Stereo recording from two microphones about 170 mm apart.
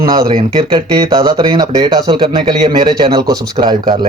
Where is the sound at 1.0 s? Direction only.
25° right (ahead or behind).